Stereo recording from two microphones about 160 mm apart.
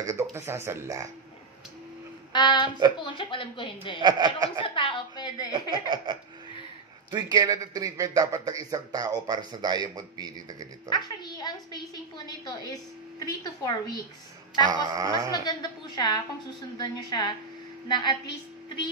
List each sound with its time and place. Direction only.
0.0 s speech: 20° right (ahead or behind)
2.3 s a woman's voice: 30° left (ahead or behind)
4.0 s a man's voice: 25° right (ahead or behind)
4.6 s a woman's voice: 30° left (ahead or behind)
5.5 s a man's voice: 30° right (ahead or behind)
10.9 s a woman's voice: 25° left (ahead or behind)
14.9 s a man's voice: 20° right (ahead or behind)
15.4 s a woman's voice: 25° left (ahead or behind)